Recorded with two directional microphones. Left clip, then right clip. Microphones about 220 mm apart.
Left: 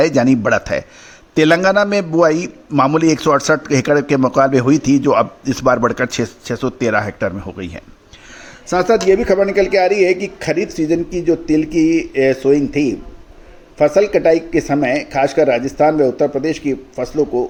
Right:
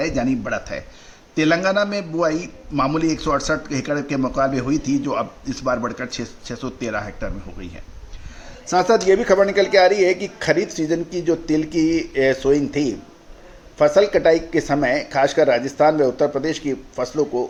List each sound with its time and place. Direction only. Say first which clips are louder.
0.0 s a man's voice: left 9 dB; 40° left (ahead or behind)
8.7 s a man's voice: left 3 dB; 25° left (ahead or behind)